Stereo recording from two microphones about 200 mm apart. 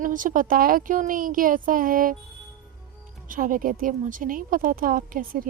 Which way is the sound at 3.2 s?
40° right (ahead or behind).